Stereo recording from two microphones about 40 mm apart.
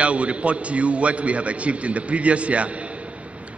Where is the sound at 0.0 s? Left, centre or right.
Right.